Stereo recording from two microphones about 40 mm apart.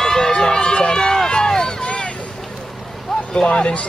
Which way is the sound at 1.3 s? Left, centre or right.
Centre.